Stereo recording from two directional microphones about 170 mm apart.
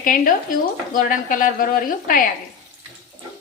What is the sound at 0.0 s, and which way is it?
A woman's voice, 50° left (ahead or behind).